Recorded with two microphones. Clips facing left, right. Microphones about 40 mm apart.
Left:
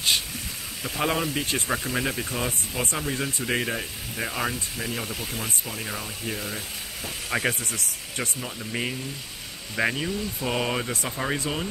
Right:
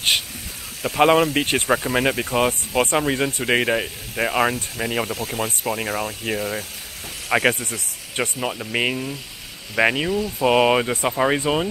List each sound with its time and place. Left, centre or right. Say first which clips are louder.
0.8 s speech: right 10 dB; right